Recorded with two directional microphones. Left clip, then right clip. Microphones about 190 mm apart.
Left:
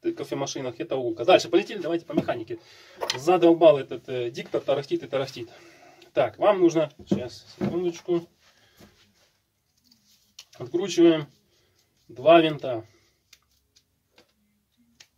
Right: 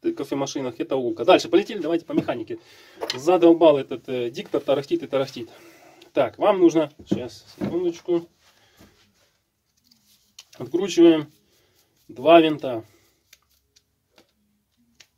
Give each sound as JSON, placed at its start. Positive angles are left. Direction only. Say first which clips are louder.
{"t": 0.0, "sound": "speech", "louder": "right 3 dB", "side_deg": -45}
{"t": 10.5, "sound": "speech", "louder": "right 3 dB", "side_deg": -45}